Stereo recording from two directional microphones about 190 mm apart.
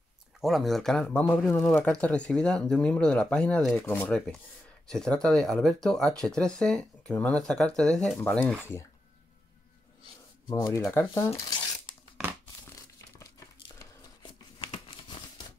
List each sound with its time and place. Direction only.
0.4 s speech: centre (ahead or behind)
10.5 s speech: 15° left (ahead or behind)
11.9 s tearing: 25° left (ahead or behind)
14.6 s crumpling: 25° left (ahead or behind)